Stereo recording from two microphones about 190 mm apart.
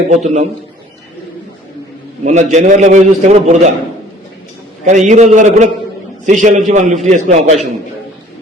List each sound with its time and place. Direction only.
0.1 s a man's voice: 40° right (ahead or behind)
2.2 s a man's voice: 40° right (ahead or behind)
4.9 s a man's voice: 40° right (ahead or behind)